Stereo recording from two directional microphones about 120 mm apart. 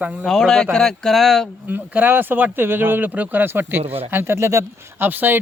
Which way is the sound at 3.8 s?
55° right (ahead or behind).